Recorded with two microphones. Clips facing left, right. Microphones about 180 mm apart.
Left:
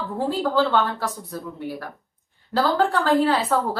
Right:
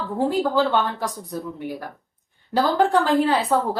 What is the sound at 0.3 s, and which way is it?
Speech, 15° right (ahead or behind).